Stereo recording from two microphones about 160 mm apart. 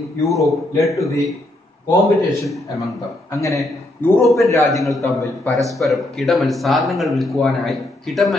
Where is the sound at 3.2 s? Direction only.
20° left (ahead or behind).